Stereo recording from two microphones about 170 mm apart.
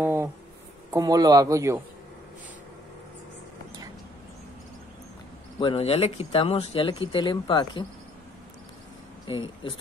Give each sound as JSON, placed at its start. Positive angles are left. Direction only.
{"t": 0.0, "sound": "a sound", "side_deg": -15}
{"t": 0.9, "sound": "a man's voice", "side_deg": -20}
{"t": 5.6, "sound": "speech", "side_deg": 35}
{"t": 9.3, "sound": "speech", "side_deg": 30}